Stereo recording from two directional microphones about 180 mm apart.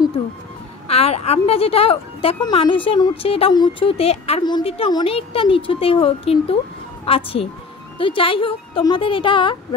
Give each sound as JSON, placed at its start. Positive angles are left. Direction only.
{"t": 0.8, "sound": "a woman's voice", "side_deg": 35}